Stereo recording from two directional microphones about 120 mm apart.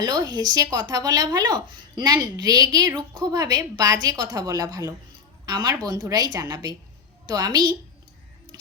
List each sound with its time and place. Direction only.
0.0 s speech: 35° right (ahead or behind)